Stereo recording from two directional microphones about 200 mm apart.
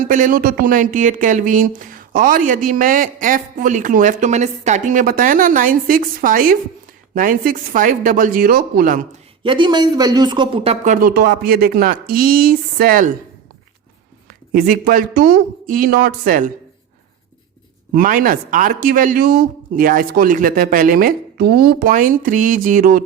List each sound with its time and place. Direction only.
0.1 s a woman's voice: 40° right (ahead or behind)
9.4 s speech: 25° right (ahead or behind)
10.9 s a woman's voice: 50° right (ahead or behind)
14.5 s a woman's voice: 45° right (ahead or behind)
17.9 s a woman's voice: 45° right (ahead or behind)